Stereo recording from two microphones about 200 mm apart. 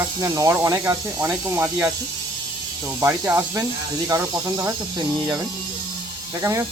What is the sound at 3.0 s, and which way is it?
Speech, 15° right (ahead or behind).